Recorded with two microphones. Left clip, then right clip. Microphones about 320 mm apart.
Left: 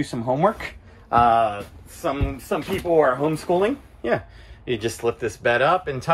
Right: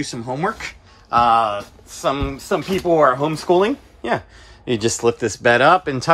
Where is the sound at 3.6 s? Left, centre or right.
Centre.